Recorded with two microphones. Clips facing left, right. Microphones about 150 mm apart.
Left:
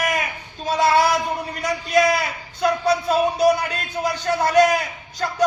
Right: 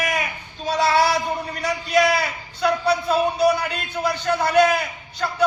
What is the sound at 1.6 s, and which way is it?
A man's voice, 45° left (ahead or behind).